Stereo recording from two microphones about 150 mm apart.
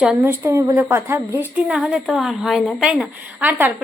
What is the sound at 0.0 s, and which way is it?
A woman's voice, 10° right (ahead or behind).